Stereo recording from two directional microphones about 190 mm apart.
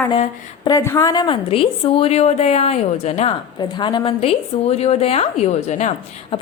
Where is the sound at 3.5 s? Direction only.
25° left (ahead or behind).